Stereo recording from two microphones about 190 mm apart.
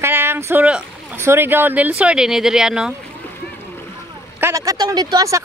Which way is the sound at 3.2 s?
10° left (ahead or behind).